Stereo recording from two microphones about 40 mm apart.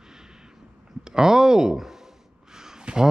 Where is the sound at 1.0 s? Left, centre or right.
Centre.